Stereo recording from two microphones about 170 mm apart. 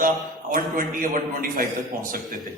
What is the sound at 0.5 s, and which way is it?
A man's voice, 55° right (ahead or behind).